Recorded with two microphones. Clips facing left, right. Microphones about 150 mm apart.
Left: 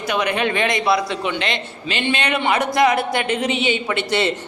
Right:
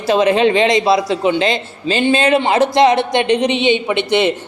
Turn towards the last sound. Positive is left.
turn(degrees=-15)  # may be behind; listen again after turning